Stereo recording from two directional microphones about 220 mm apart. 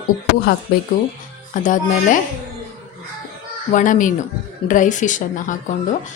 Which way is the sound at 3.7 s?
35° left (ahead or behind).